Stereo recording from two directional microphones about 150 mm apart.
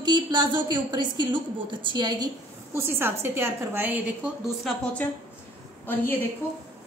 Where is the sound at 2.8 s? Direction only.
15° right (ahead or behind).